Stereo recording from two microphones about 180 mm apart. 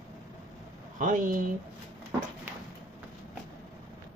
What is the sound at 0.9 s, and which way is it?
Speech, 45° right (ahead or behind).